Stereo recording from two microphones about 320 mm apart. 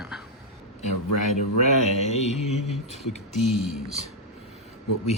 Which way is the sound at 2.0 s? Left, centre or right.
Left.